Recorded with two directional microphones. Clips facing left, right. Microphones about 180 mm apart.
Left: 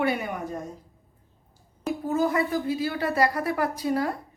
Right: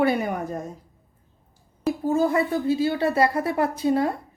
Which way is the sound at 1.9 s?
25° right (ahead or behind).